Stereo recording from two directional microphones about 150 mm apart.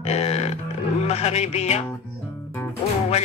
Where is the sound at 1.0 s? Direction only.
45° left (ahead or behind).